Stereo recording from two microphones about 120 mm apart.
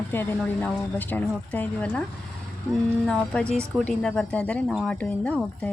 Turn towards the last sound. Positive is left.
turn(degrees=10)  # may be behind; listen again after turning